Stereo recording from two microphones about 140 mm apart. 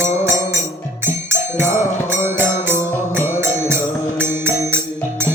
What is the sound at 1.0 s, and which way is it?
Music, 15° right (ahead or behind).